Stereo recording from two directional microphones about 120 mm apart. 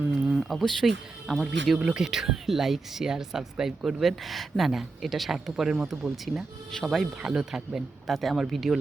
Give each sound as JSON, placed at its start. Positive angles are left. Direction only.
{"t": 0.0, "sound": "speech", "side_deg": -5}